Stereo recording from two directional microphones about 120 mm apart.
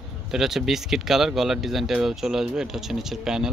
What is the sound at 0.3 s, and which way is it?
Speech, 5° right (ahead or behind).